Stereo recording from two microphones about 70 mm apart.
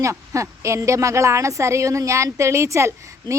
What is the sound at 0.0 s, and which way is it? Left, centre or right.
A woman's voice, right.